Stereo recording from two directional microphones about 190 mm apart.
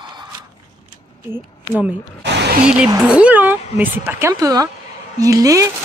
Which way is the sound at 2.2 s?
65° right (ahead or behind).